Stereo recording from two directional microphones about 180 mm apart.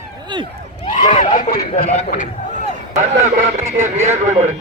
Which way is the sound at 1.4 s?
50° left (ahead or behind).